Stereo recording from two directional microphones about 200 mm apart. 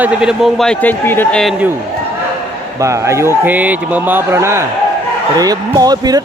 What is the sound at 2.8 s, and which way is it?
Speech, 15° right (ahead or behind).